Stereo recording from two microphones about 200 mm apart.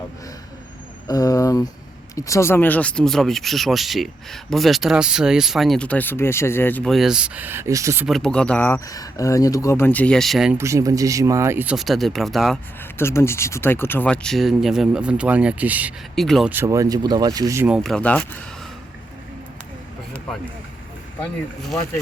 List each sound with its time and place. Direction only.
1.0 s a sound: 15° left (ahead or behind)
2.1 s speech: 15° left (ahead or behind); by 8.0 s 15° right (ahead or behind)
8.0 s speech: 5° left (ahead or behind)
10.6 s speech: 15° right (ahead or behind); by 12.5 s centre (ahead or behind)
13.0 s speech: 10° left (ahead or behind)
16.5 s speech: 15° right (ahead or behind)
17.7 s speech: 5° left (ahead or behind)